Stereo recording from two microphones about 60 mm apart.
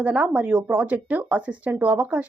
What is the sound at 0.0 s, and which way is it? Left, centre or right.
A woman's voice, right.